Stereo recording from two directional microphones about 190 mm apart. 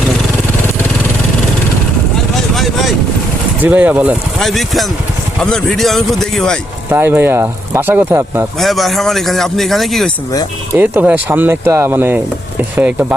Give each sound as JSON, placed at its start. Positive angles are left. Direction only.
{"t": 2.3, "sound": "a sound", "side_deg": 0}
{"t": 3.6, "sound": "speech", "side_deg": -10}
{"t": 6.9, "sound": "speech", "side_deg": -10}
{"t": 8.5, "sound": "speech", "side_deg": 0}
{"t": 10.8, "sound": "speech", "side_deg": -10}